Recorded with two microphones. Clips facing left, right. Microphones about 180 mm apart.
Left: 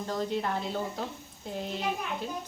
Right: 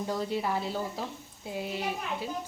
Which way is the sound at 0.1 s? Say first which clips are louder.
Left 1 dB; 10° right (ahead or behind).